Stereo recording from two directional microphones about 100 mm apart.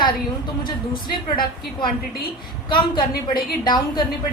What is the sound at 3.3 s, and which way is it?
Speech, 50° left (ahead or behind).